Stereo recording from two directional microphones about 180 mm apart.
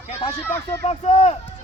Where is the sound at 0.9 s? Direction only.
40° left (ahead or behind).